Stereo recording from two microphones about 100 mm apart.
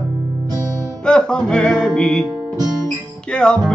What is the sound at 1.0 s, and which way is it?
Music, 10° left (ahead or behind).